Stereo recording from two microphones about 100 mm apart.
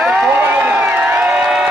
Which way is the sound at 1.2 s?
5° right (ahead or behind).